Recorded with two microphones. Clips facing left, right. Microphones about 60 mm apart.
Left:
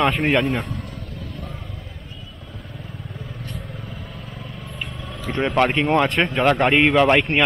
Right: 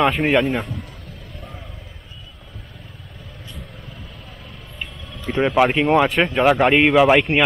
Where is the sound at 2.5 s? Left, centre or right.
Centre.